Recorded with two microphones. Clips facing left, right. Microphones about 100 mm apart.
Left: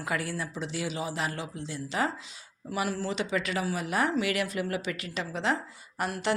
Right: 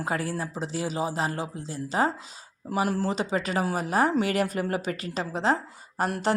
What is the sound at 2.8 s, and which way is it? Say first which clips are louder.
Speech: right 4 dB; 45° right (ahead or behind).